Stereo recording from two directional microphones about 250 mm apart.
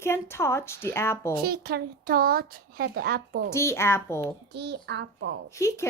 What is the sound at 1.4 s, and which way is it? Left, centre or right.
Speech, right.